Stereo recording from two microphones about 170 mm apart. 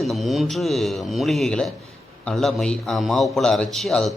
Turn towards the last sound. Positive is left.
turn(degrees=0)  # may be behind; listen again after turning